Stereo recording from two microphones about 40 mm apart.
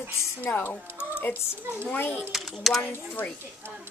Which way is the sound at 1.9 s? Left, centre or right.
Left.